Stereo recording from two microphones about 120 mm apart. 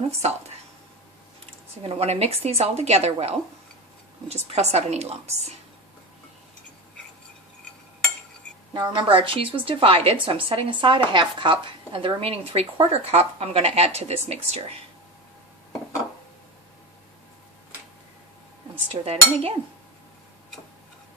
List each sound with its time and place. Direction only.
1.4 s speech: 60° right (ahead or behind)
8.7 s a woman's voice: 40° right (ahead or behind); by 14.8 s 60° right (ahead or behind)
18.9 s speech: 55° right (ahead or behind)